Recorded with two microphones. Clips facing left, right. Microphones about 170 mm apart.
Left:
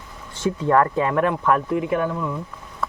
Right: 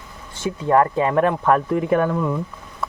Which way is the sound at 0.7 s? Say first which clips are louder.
Right 2 dB; 25° right (ahead or behind).